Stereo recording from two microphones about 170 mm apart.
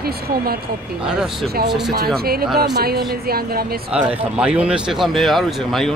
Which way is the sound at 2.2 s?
65° right (ahead or behind).